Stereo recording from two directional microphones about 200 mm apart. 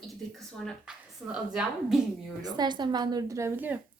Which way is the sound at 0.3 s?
Centre (ahead or behind).